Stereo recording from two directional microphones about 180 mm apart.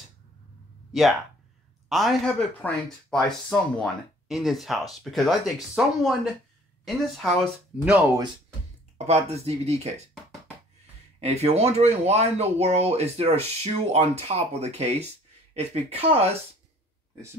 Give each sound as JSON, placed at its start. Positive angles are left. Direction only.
{"t": 1.9, "sound": "speech", "side_deg": 0}
{"t": 8.9, "sound": "speech", "side_deg": -35}
{"t": 11.1, "sound": "speech", "side_deg": -35}